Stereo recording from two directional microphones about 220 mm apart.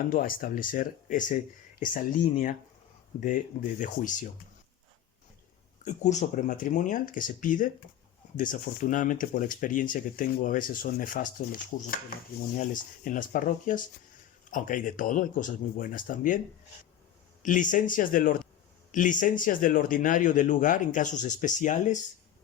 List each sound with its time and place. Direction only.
0.1 s speech: 40° left (ahead or behind)
3.2 s speech: 35° left (ahead or behind)
5.8 s speech: 35° left (ahead or behind)
17.4 s speech: 35° left (ahead or behind)